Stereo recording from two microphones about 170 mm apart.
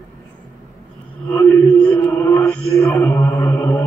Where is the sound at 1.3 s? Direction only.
10° left (ahead or behind).